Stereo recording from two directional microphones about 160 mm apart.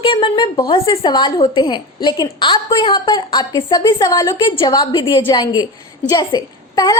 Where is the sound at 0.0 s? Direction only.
30° left (ahead or behind).